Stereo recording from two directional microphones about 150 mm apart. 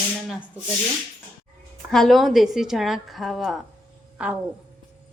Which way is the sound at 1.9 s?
Centre (ahead or behind).